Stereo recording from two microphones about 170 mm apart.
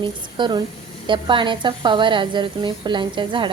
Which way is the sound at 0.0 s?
30° right (ahead or behind).